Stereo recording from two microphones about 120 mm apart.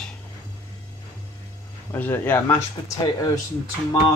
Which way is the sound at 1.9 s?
15° left (ahead or behind).